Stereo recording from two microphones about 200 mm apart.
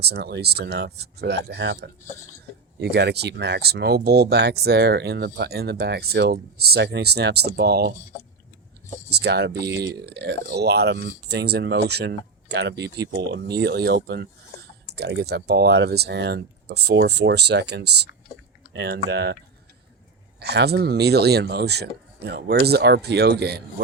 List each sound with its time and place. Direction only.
0.0 s speech: 55° right (ahead or behind)
9.0 s speech: 55° right (ahead or behind)
20.4 s speech: 55° right (ahead or behind)